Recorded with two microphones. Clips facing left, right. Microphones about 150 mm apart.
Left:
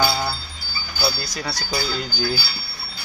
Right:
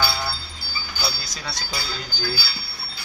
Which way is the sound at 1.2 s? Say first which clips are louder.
Left 5 dB; centre (ahead or behind).